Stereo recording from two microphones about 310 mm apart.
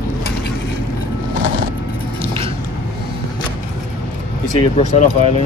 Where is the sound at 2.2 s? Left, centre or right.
Centre.